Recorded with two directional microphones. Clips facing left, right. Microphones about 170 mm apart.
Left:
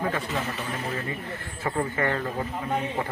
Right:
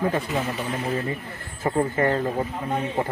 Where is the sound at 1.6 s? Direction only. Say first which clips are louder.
Right 5 dB; 35° right (ahead or behind).